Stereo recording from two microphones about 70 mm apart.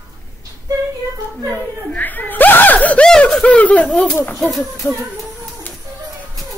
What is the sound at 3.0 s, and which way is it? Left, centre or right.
Snicker, centre.